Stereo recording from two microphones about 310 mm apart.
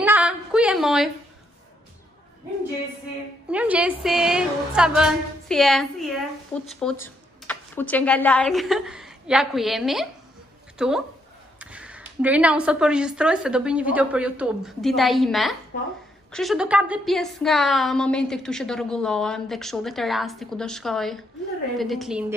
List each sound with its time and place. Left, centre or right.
0.0 s a sound: centre
3.4 s a woman's voice: centre
15.7 s a woman's voice: left
16.3 s a woman's voice: centre